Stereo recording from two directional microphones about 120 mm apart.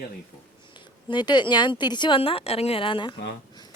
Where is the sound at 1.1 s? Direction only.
40° left (ahead or behind).